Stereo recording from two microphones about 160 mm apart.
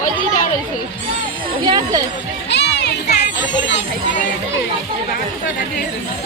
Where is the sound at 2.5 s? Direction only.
90° left.